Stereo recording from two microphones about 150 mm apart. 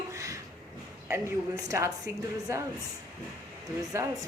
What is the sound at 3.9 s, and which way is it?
Speech, 20° right (ahead or behind).